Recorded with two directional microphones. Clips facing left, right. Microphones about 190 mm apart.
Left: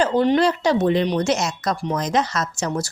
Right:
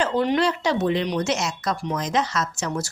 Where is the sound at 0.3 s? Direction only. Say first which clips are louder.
Left 4 dB; 40° left (ahead or behind).